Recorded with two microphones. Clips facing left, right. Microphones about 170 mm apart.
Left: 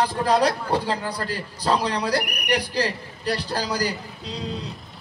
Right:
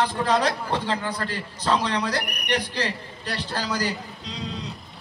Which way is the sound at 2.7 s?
35° left (ahead or behind).